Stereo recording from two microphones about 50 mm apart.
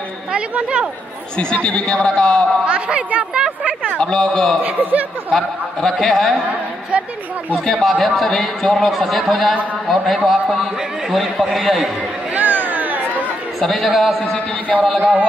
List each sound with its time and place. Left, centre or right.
0.3 s speech: right
1.3 s speech: left
2.6 s speech: right
4.0 s a man's voice: centre
4.6 s speech: right
5.3 s a man's voice: centre
7.6 s a man's voice: centre
12.4 s chatter: right
13.6 s a man's voice: centre